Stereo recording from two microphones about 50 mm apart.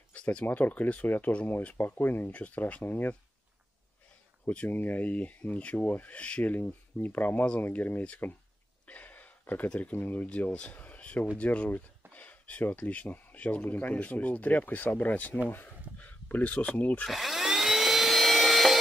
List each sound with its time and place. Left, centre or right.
0.1 s speech: left
2.3 s speech: left
2.8 s speech: left
4.5 s speech: left
6.5 s speech: left
8.8 s a sound: left
9.9 s speech: left
10.2 s speech: left
15.5 s a sound: left
16.3 s speech: left
17.1 s a sound: centre